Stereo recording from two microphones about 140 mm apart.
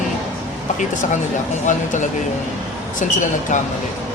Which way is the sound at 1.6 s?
60° left (ahead or behind).